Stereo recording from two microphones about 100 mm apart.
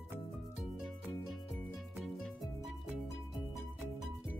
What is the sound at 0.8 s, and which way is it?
Music, centre (ahead or behind).